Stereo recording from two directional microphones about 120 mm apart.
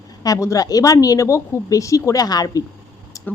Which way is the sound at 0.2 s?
30° left (ahead or behind).